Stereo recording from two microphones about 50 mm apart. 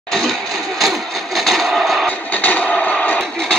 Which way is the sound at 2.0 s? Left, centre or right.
Left.